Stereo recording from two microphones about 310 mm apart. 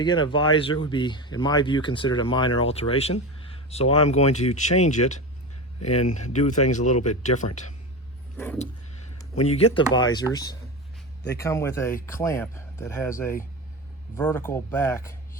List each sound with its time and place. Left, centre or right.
0.0 s speech: centre
9.4 s speech: centre